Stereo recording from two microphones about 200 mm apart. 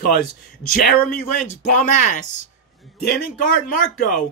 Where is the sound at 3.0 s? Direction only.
50° left (ahead or behind).